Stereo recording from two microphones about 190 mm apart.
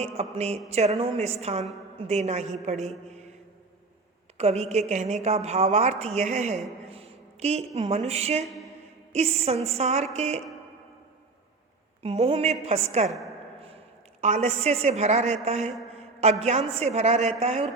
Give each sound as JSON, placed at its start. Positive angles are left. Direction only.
{"t": 0.0, "sound": "a woman's voice", "side_deg": -35}
{"t": 4.4, "sound": "a woman's voice", "side_deg": -35}
{"t": 6.9, "sound": "a sound", "side_deg": -35}
{"t": 7.8, "sound": "a woman's voice", "side_deg": -35}
{"t": 12.0, "sound": "a woman's voice", "side_deg": -30}
{"t": 14.2, "sound": "a woman's voice", "side_deg": -35}